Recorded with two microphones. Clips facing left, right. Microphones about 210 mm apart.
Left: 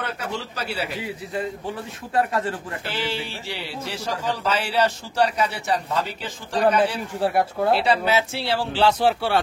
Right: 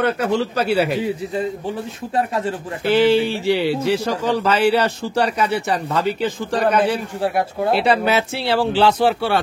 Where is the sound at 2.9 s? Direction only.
65° right (ahead or behind).